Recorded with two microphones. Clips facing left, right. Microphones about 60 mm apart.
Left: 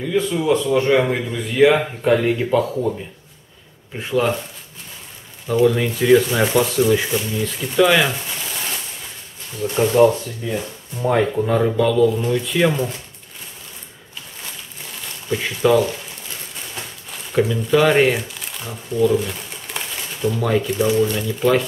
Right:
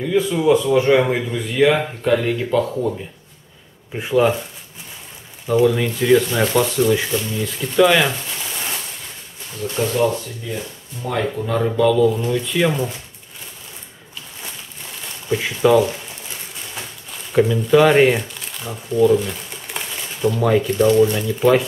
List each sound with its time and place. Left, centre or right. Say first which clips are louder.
0.0 s speech: right 2 dB; centre
3.9 s speech: right 3 dB; centre
5.5 s speech: even; centre
9.6 s speech: left 5 dB; centre
11.5 s speech: right 2 dB; centre
15.2 s speech: right 1 dB; centre
17.3 s speech: right 3 dB; centre
18.9 s a sound: right 2 dB; centre
20.4 s speech: right 4 dB; centre